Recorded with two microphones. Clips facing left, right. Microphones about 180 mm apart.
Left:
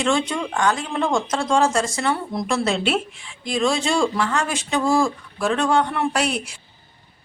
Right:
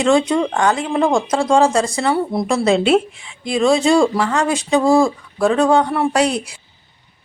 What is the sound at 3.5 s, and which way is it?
Speech, 35° right (ahead or behind).